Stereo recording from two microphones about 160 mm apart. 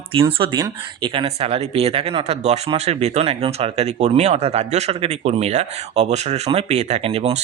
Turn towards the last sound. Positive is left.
turn(degrees=-40)  # may be behind; listen again after turning